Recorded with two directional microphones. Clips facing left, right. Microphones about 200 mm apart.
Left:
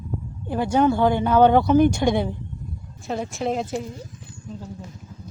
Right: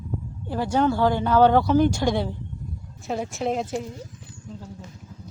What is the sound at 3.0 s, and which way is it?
Speech, 5° right (ahead or behind).